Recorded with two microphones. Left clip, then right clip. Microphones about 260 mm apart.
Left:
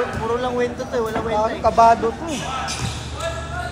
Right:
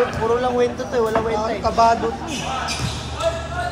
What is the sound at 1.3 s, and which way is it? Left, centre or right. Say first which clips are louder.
Speech: left 3 dB; centre.